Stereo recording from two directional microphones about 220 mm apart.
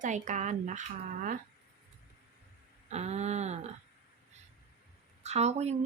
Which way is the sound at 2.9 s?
30° right (ahead or behind).